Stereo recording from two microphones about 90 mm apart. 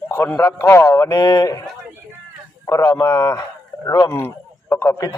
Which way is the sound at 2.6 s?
45° left (ahead or behind).